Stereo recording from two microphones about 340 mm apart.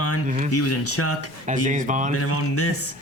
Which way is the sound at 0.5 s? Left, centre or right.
Left.